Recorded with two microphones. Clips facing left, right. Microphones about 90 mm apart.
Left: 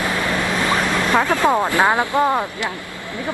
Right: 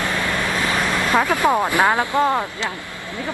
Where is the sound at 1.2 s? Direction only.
20° left (ahead or behind).